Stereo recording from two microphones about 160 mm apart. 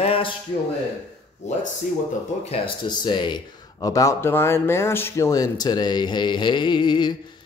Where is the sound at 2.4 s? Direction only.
35° left (ahead or behind).